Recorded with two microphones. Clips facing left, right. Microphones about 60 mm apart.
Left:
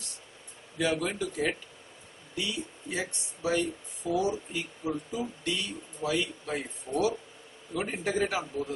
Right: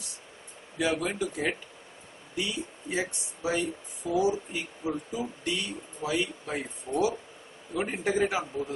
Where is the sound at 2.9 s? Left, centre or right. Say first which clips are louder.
Right 4 dB; centre.